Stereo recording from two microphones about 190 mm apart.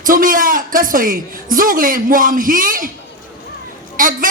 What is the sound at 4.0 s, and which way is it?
Speech, 45° right (ahead or behind).